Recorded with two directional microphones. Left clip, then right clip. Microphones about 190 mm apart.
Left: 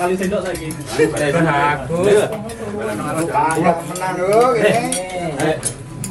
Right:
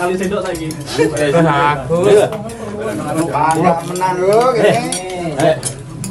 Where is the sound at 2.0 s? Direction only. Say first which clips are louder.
Right 4 dB; centre (ahead or behind).